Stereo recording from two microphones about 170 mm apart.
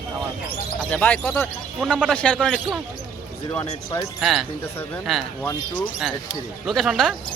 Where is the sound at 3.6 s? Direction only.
20° left (ahead or behind).